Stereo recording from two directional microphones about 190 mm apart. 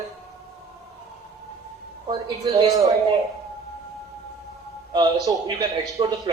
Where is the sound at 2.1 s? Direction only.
25° right (ahead or behind).